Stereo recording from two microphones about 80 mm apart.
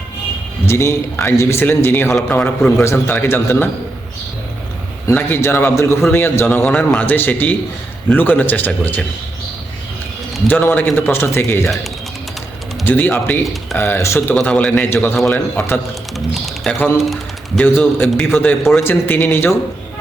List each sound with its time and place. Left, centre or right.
0.6 s a man's voice: left
5.1 s a man's voice: left
10.5 s a man's voice: left
12.8 s a man's voice: left
13.4 s speech: centre
13.7 s a man's voice: left
14.4 s a man's voice: centre
15.3 s a man's voice: left
16.1 s speech: centre
16.7 s a man's voice: left
17.0 s speech: centre
17.6 s a man's voice: left